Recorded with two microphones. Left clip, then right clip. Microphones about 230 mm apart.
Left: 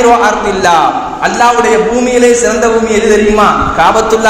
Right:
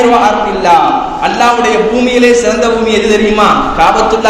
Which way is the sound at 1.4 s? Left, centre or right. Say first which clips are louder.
Left 2 dB; left.